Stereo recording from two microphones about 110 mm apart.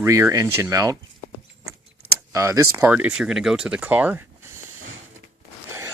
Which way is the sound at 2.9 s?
10° right (ahead or behind).